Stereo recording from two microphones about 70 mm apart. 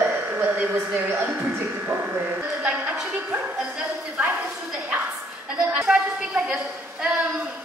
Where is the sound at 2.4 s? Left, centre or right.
Centre.